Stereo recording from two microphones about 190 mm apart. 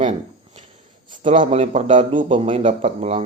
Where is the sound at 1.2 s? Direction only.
35° right (ahead or behind).